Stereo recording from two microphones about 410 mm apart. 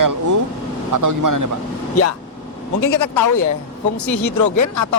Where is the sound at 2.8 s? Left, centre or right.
Left.